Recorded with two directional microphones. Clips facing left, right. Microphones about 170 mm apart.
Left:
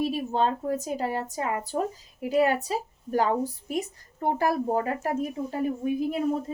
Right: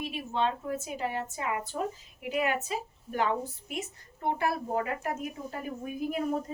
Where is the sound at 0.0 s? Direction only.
40° left (ahead or behind).